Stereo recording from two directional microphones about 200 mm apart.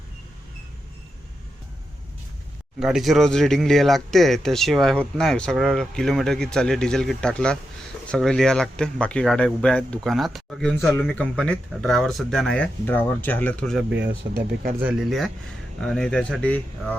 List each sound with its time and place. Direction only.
2.8 s speech: centre (ahead or behind)
13.9 s speech: 50° right (ahead or behind)
14.8 s speech: 5° right (ahead or behind)